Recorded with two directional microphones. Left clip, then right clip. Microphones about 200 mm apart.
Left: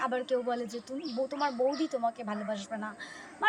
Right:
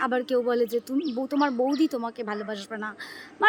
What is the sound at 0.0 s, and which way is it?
A woman's voice, 20° right (ahead or behind).